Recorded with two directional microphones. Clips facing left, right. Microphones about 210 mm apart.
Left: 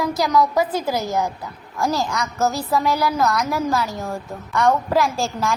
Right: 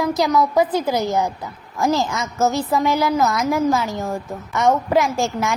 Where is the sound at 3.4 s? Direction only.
20° right (ahead or behind).